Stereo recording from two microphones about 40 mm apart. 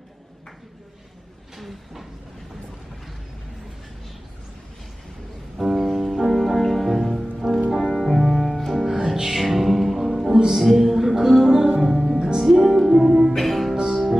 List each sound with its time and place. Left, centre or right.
5.6 s music: centre
8.9 s music: centre
12.2 s music: right
12.4 s music: centre
13.4 s music: centre